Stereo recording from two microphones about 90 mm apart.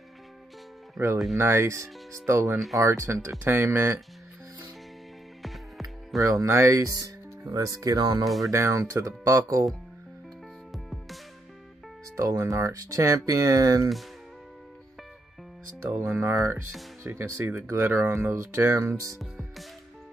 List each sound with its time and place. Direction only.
0.9 s speech: 30° right (ahead or behind)
5.4 s music: centre (ahead or behind)
6.2 s speech: 35° right (ahead or behind)
8.5 s speech: 30° right (ahead or behind)
10.7 s music: centre (ahead or behind)
12.2 s speech: 35° right (ahead or behind)
16.0 s speech: 30° right (ahead or behind)
19.1 s music: centre (ahead or behind)